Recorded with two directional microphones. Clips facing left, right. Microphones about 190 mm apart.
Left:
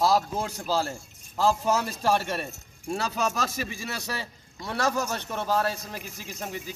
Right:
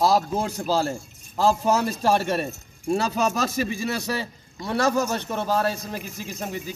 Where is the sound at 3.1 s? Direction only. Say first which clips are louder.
Right 5 dB; 20° right (ahead or behind).